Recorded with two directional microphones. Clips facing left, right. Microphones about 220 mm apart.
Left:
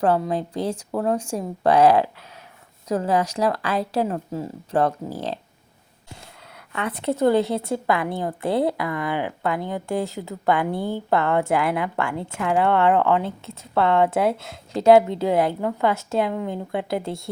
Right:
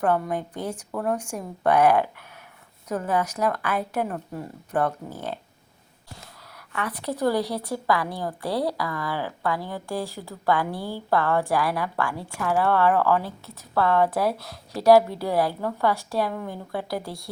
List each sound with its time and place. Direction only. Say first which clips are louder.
0.2 s speech: left 4 dB; 25° left (ahead or behind)
2.9 s speech: left 4 dB; 30° left (ahead or behind)
4.0 s speech: left 5 dB; 25° left (ahead or behind)
5.0 s speech: left 4 dB; 35° left (ahead or behind)
6.7 s speech: left 5 dB; 25° left (ahead or behind)